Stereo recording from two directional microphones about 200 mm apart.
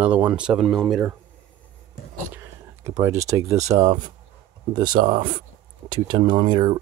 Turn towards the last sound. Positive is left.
turn(degrees=-25)  # may be behind; listen again after turning